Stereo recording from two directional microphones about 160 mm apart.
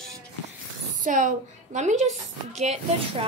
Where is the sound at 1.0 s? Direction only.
55° right (ahead or behind).